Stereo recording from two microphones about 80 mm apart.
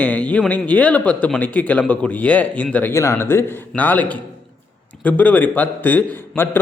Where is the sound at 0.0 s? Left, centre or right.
Centre.